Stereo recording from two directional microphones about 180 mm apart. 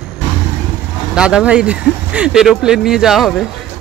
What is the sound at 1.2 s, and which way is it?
Speech, 5° right (ahead or behind).